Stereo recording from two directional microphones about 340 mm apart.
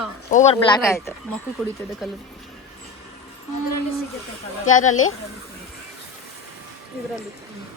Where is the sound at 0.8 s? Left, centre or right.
Centre.